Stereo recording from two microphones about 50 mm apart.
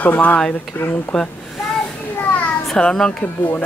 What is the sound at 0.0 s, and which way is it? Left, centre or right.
Speech, left.